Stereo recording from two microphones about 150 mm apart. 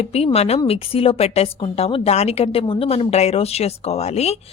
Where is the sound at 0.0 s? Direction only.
45° left (ahead or behind).